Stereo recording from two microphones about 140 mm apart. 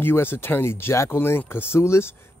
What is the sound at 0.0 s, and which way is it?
Speech, 15° left (ahead or behind).